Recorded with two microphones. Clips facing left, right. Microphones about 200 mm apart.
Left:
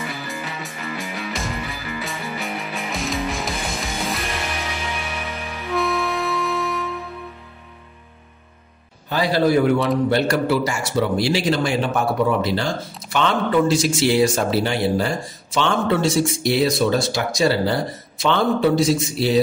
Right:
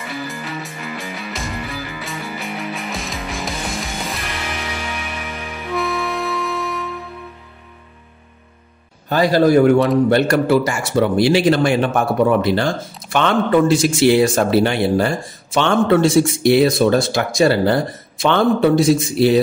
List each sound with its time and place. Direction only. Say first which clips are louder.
0.3 s music: right 2 dB; centre (ahead or behind)
5.6 s music: even; centre (ahead or behind)
9.1 s a man's voice: right 5 dB; 45° right (ahead or behind)